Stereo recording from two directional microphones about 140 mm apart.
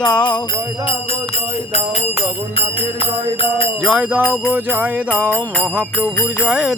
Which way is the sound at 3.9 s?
10° right (ahead or behind).